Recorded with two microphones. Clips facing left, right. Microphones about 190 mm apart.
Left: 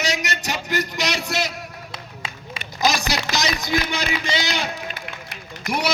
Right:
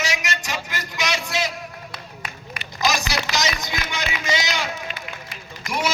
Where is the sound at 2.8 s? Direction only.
35° left (ahead or behind).